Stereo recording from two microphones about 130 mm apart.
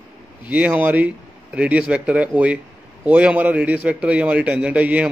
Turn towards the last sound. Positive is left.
turn(degrees=-10)  # may be behind; listen again after turning